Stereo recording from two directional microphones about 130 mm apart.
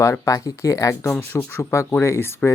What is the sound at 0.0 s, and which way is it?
Speech, 25° left (ahead or behind).